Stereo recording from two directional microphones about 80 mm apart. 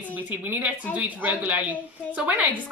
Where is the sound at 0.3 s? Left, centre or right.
Right.